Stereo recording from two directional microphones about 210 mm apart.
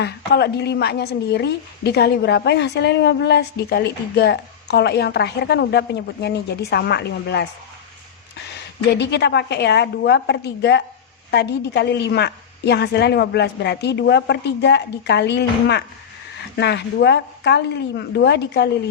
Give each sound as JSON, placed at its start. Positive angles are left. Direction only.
{"t": 0.0, "sound": "a woman's voice", "side_deg": 55}
{"t": 8.9, "sound": "a woman's voice", "side_deg": 55}